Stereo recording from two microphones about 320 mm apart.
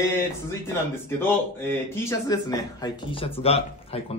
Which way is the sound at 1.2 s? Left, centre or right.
Centre.